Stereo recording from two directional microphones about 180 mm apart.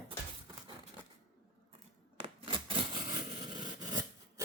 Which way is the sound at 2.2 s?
30° right (ahead or behind).